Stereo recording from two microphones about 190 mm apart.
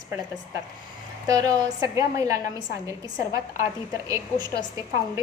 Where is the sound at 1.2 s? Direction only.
20° right (ahead or behind).